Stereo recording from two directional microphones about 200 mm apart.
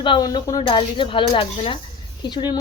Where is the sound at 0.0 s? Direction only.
20° left (ahead or behind).